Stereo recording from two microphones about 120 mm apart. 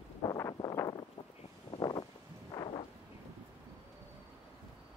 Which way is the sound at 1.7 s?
35° left (ahead or behind).